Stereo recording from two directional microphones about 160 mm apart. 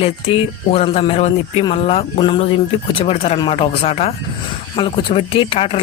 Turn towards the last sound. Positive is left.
turn(degrees=35)  # may be behind; listen again after turning